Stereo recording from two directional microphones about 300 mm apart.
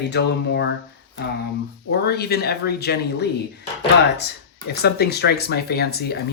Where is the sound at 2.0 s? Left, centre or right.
Left.